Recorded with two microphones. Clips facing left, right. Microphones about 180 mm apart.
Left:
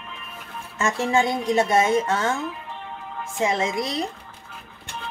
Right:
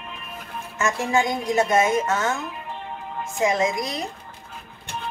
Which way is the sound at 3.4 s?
30° left (ahead or behind).